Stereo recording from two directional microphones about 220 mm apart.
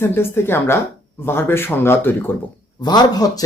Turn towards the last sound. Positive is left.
turn(degrees=15)  # may be behind; listen again after turning